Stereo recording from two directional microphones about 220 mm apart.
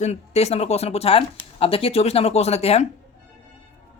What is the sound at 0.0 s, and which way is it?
Speech, 30° left (ahead or behind).